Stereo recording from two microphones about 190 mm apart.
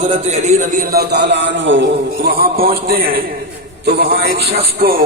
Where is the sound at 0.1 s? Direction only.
35° right (ahead or behind); by 2.0 s 75° right (ahead or behind).